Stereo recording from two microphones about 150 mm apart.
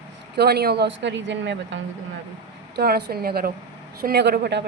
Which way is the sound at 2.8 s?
90° right.